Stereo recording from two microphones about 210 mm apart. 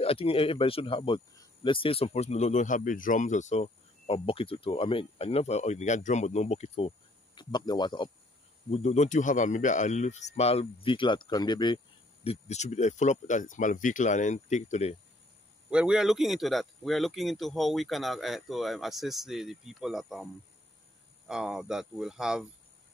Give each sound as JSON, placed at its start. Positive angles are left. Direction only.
{"t": 0.0, "sound": "speech", "side_deg": 25}
{"t": 8.6, "sound": "speech", "side_deg": 30}
{"t": 15.7, "sound": "speech", "side_deg": -5}
{"t": 21.3, "sound": "speech", "side_deg": -5}